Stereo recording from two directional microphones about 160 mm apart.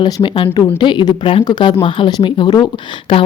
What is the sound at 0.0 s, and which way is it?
Speech, 30° left (ahead or behind).